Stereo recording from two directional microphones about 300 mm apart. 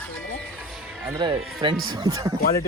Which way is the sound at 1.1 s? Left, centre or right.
Centre.